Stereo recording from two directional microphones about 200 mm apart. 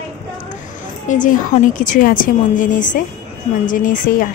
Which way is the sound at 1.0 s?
40° left (ahead or behind).